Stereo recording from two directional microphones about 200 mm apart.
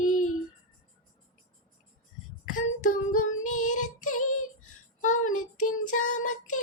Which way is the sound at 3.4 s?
90° left.